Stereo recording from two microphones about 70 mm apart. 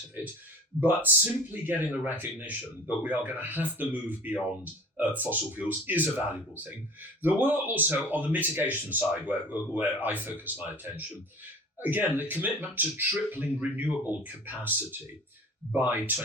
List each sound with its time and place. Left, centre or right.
0.8 s speech: right
15.7 s speech: right